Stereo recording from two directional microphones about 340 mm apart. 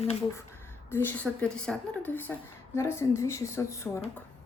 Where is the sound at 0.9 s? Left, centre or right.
Centre.